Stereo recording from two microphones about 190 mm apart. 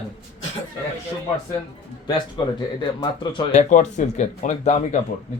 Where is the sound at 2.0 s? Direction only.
25° left (ahead or behind); by 4.8 s 40° left (ahead or behind).